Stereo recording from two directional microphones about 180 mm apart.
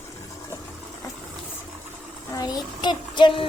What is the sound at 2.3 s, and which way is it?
Child singing, 20° left (ahead or behind).